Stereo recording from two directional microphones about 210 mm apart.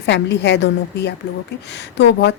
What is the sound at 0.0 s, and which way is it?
A woman's voice, 55° left (ahead or behind).